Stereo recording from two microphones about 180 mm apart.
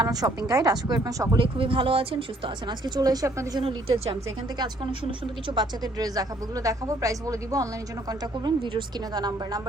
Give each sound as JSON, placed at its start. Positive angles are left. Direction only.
{"t": 0.0, "sound": "a woman's voice", "side_deg": -20}
{"t": 3.6, "sound": "a woman's voice", "side_deg": -30}